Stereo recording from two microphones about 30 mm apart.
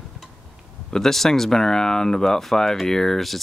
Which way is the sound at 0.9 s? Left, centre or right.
Centre.